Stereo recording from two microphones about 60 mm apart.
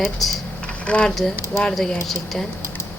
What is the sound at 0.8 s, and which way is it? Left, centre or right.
Speech, centre.